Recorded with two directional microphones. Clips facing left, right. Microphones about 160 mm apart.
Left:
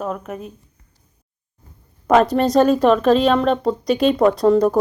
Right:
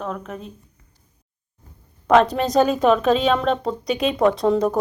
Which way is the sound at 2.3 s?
Centre (ahead or behind).